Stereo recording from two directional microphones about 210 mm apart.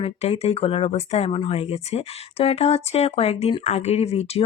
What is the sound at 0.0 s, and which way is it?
Speech, 30° left (ahead or behind).